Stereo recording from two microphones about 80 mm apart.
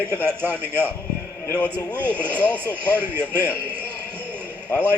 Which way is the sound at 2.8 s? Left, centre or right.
Right.